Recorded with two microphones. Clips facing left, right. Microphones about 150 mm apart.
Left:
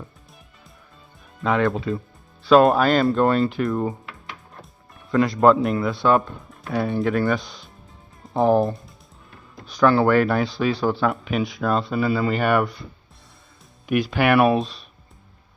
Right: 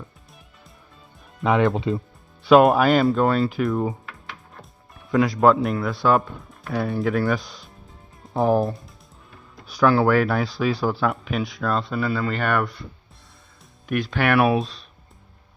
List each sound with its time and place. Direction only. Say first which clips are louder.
1.5 s speech: right 1 dB; 20° right (ahead or behind)
2.4 s music: right 1 dB; 15° right (ahead or behind)
2.6 s speech: even; 10° right (ahead or behind)
5.1 s speech: left 1 dB; 5° right (ahead or behind)
13.8 s speech: left 3 dB; 5° left (ahead or behind)